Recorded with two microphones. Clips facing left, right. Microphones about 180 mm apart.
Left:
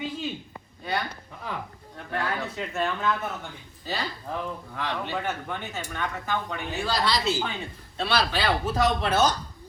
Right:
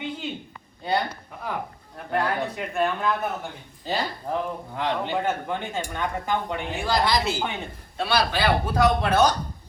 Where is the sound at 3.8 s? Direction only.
20° right (ahead or behind).